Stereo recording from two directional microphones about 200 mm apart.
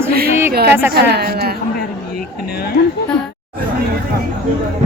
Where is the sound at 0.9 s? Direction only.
55° right (ahead or behind).